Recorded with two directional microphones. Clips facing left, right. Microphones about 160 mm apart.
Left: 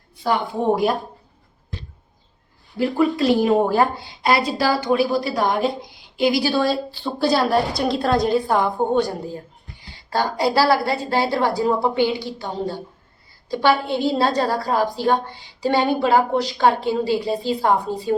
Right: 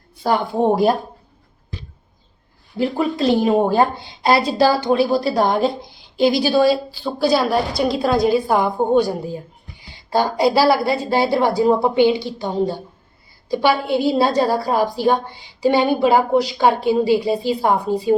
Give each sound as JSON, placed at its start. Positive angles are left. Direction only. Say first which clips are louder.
{"t": 0.2, "sound": "speech", "louder": "right 4 dB", "side_deg": -35}
{"t": 2.7, "sound": "speech", "louder": "left 1 dB", "side_deg": -25}
{"t": 6.4, "sound": "a woman's voice", "louder": "right 5 dB", "side_deg": -10}